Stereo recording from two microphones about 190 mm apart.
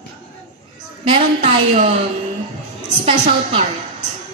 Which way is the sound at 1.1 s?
35° right (ahead or behind).